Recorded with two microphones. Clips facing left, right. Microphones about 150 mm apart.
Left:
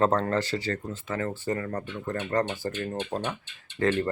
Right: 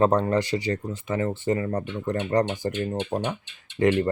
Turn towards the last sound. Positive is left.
turn(degrees=-15)  # may be behind; listen again after turning